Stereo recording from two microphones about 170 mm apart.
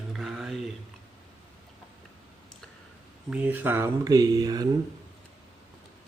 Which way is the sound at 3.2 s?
10° right (ahead or behind).